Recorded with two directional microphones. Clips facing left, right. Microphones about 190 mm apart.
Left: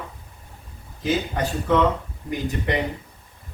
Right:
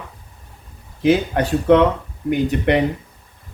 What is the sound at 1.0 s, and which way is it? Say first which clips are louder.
Speech: right 7 dB; 65° right (ahead or behind).